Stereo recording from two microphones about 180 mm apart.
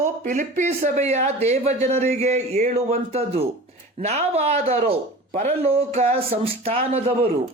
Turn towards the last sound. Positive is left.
turn(degrees=-35)  # may be behind; listen again after turning